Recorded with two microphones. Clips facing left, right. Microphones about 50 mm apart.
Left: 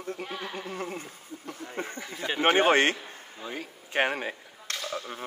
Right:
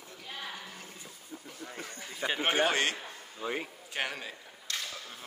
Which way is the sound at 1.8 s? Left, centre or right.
Left.